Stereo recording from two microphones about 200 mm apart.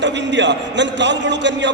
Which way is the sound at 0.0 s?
60° right (ahead or behind).